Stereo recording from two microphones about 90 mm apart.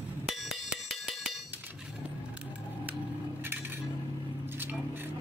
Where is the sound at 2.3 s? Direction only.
15° right (ahead or behind).